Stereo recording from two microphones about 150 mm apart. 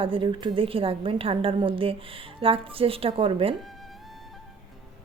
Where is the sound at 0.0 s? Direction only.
35° right (ahead or behind).